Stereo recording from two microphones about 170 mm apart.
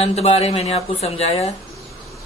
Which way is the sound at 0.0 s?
40° left (ahead or behind).